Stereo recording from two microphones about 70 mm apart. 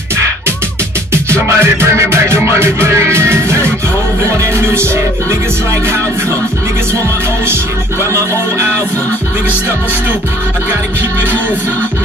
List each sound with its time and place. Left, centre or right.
1.6 s music: right
8.1 s music: right